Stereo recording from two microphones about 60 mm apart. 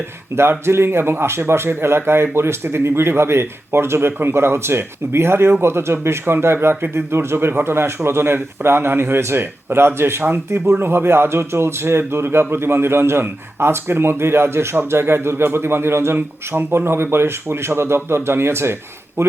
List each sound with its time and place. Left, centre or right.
0.3 s speech: right